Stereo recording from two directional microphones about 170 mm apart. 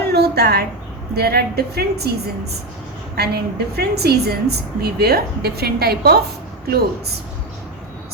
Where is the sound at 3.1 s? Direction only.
70° right (ahead or behind).